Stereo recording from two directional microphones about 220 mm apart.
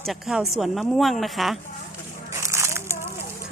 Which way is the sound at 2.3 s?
10° right (ahead or behind).